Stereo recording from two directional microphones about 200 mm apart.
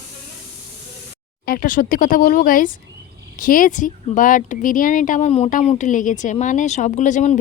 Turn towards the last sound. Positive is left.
turn(degrees=40)  # may be behind; listen again after turning